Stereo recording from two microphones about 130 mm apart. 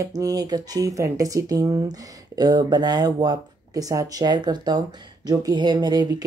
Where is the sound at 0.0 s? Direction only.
25° right (ahead or behind).